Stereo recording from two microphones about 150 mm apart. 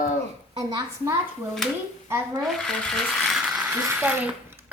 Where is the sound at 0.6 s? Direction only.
25° right (ahead or behind).